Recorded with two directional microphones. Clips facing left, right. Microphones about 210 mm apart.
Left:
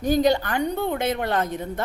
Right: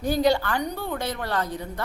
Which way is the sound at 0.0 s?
20° left (ahead or behind).